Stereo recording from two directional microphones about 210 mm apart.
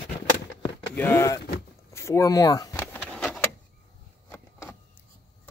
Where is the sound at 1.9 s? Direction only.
15° left (ahead or behind).